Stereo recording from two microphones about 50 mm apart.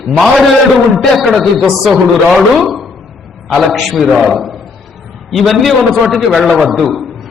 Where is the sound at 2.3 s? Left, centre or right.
Centre.